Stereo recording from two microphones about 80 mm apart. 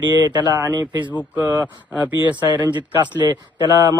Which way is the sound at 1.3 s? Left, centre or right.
Right.